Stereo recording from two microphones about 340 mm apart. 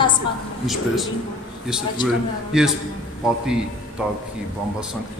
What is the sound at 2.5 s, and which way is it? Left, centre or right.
Speech, centre.